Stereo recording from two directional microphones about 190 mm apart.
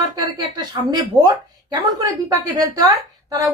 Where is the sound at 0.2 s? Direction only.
20° right (ahead or behind).